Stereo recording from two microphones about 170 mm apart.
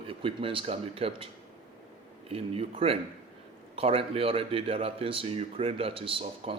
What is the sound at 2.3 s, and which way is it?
Speech, 35° right (ahead or behind).